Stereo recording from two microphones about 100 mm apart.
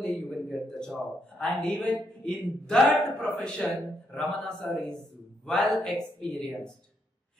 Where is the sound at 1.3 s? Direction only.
5° left (ahead or behind).